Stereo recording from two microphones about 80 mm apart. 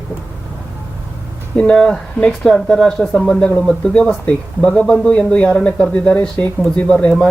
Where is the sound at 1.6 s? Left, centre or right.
Centre.